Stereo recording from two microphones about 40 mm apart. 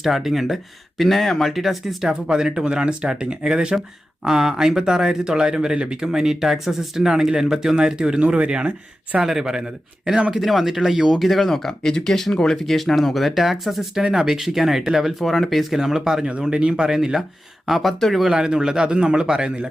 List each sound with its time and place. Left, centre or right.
0.0 s speech: centre
3.8 s speech: centre
8.2 s speech: right
9.2 s speech: centre
12.6 s speech: centre
15.2 s speech: centre
15.7 s speech: centre
16.4 s speech: right
17.7 s speech: centre
18.3 s speech: centre